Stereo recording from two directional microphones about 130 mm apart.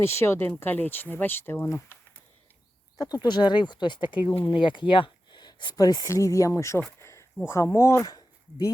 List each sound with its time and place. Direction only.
0.0 s speech: 20° left (ahead or behind)
3.2 s speech: 35° left (ahead or behind)
7.0 s a sound: 20° left (ahead or behind)
7.4 s speech: 20° left (ahead or behind)